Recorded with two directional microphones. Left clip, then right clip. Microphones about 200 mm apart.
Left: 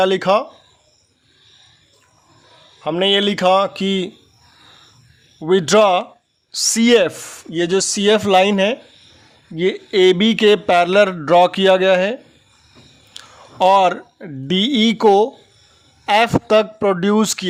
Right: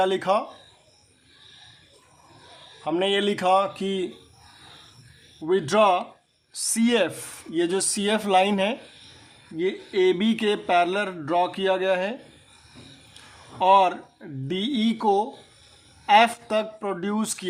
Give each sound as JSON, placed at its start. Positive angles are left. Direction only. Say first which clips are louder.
{"t": 0.0, "sound": "speech", "louder": "left 7 dB", "side_deg": 45}
{"t": 2.8, "sound": "speech", "louder": "left 7 dB", "side_deg": 45}
{"t": 5.4, "sound": "speech", "louder": "left 7 dB", "side_deg": 50}
{"t": 13.2, "sound": "a sound", "louder": "left 12 dB", "side_deg": 50}
{"t": 13.6, "sound": "speech", "louder": "left 5 dB", "side_deg": 50}